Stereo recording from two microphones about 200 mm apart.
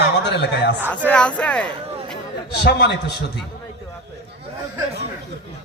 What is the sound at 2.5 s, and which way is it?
Speech, 55° left (ahead or behind).